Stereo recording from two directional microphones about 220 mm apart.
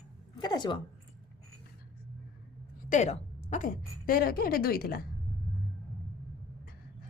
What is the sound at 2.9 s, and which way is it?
A woman's voice, 30° left (ahead or behind).